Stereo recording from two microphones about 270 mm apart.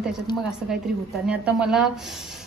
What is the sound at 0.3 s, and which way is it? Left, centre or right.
Speech, centre.